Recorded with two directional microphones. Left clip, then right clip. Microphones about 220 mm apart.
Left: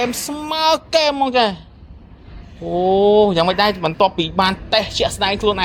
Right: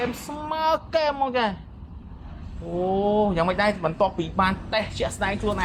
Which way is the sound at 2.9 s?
50° left (ahead or behind).